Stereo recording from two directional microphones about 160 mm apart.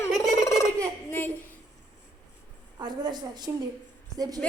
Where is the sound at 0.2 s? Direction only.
20° left (ahead or behind).